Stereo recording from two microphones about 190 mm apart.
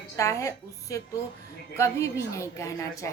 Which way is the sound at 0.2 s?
15° left (ahead or behind).